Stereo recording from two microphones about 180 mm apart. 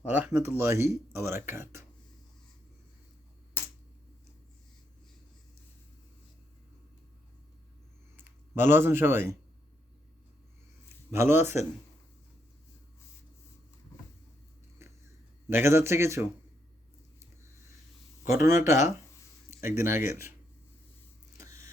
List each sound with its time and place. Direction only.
0.0 s speech: 10° right (ahead or behind)
8.1 s speech: 10° right (ahead or behind)
11.1 s speech: 15° right (ahead or behind)
14.8 s a sound: 15° right (ahead or behind)
15.4 s speech: 15° right (ahead or behind)
18.3 s speech: 15° right (ahead or behind)
19.5 s a sound: 15° right (ahead or behind)
19.9 s speech: 15° right (ahead or behind)
21.3 s vehicle: 15° right (ahead or behind)